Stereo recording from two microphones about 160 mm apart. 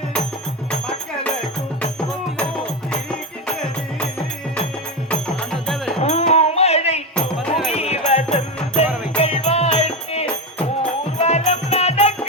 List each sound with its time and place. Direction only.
0.7 s music: 5° left (ahead or behind)
5.0 s music: 5° left (ahead or behind)
6.0 s music: 45° left (ahead or behind)
7.2 s music: centre (ahead or behind)
7.7 s music: 40° left (ahead or behind)